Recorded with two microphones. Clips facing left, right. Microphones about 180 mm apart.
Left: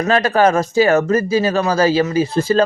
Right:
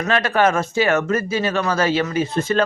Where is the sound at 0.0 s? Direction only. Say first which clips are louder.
Left 4 dB; 40° left (ahead or behind).